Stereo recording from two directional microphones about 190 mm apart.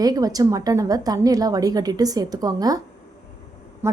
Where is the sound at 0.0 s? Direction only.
20° right (ahead or behind).